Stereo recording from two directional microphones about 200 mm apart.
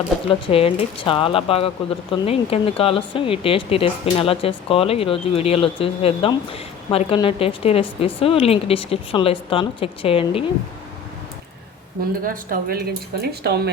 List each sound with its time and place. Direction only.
0.3 s speech: 25° left (ahead or behind)
12.2 s speech: 45° right (ahead or behind)